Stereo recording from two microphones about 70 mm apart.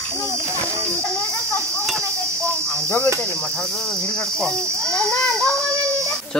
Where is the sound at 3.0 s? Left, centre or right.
Right.